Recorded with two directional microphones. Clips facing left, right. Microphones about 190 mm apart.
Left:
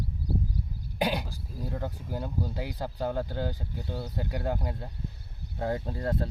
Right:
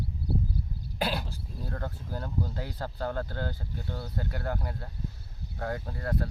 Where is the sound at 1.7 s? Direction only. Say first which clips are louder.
Left 2 dB; 15° left (ahead or behind).